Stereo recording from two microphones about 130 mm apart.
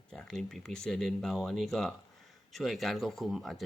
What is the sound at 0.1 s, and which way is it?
Speech, 5° left (ahead or behind).